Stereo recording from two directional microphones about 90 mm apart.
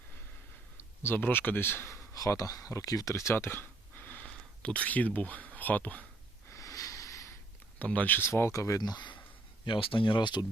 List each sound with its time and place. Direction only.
0.8 s speech: 25° left (ahead or behind)
6.5 s a sound: 35° left (ahead or behind)
7.8 s speech: 20° left (ahead or behind); by 9.1 s 50° left (ahead or behind)
9.6 s speech: 70° left (ahead or behind)